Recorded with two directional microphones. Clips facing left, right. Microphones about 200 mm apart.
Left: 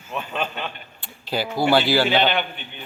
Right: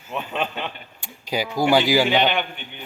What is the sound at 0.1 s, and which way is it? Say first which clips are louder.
A man's voice: right 1 dB; 20° right (ahead or behind).